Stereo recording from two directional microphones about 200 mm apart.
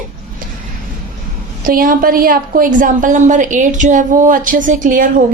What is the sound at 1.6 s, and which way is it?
A woman's voice, 45° right (ahead or behind).